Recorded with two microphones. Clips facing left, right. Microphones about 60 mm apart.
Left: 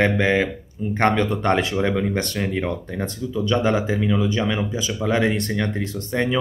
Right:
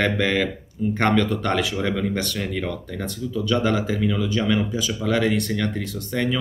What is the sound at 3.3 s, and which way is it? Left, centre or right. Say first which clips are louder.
Speech: left 1 dB; left.